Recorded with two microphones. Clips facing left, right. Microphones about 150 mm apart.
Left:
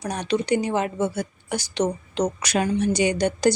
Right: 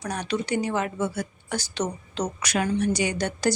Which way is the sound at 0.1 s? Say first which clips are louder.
Left 4 dB; 20° left (ahead or behind).